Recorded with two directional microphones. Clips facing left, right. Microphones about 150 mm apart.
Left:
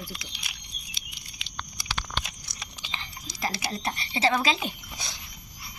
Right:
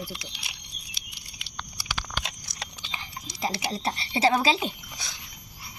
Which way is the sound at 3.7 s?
30° right (ahead or behind).